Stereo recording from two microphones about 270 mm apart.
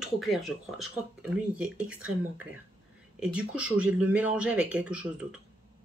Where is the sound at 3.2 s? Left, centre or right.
Centre.